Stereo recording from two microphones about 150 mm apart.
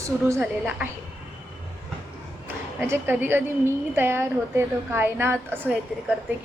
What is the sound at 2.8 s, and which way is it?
A woman's voice, 15° right (ahead or behind).